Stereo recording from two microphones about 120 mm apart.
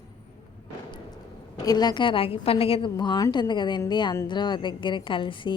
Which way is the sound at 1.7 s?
35° left (ahead or behind).